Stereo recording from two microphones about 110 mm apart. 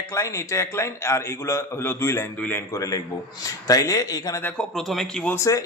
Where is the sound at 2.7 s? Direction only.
30° left (ahead or behind).